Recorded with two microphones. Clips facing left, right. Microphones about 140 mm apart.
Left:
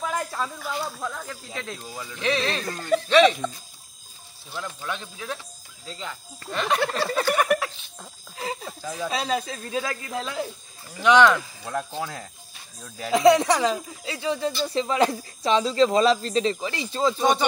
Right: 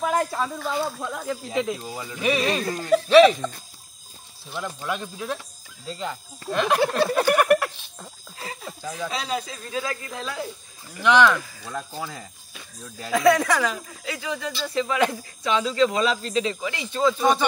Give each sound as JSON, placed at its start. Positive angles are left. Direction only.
{"t": 0.0, "sound": "snake", "side_deg": -5}
{"t": 1.1, "sound": "speech", "side_deg": -15}
{"t": 4.6, "sound": "speech", "side_deg": -10}
{"t": 6.5, "sound": "speech", "side_deg": -10}
{"t": 6.8, "sound": "a sound", "side_deg": -15}
{"t": 7.4, "sound": "a sound", "side_deg": 0}
{"t": 9.1, "sound": "speech", "side_deg": 30}
{"t": 11.0, "sound": "speech", "side_deg": 15}
{"t": 11.7, "sound": "speech", "side_deg": 0}
{"t": 13.1, "sound": "speech", "side_deg": 20}